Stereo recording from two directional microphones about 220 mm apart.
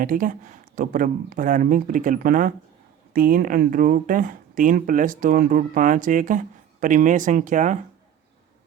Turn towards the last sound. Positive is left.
turn(degrees=-35)  # may be behind; listen again after turning